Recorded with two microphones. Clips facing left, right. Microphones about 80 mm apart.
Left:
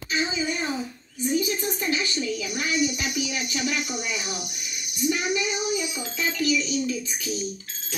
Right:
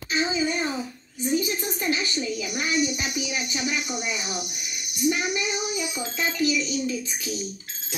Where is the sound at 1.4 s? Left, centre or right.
Right.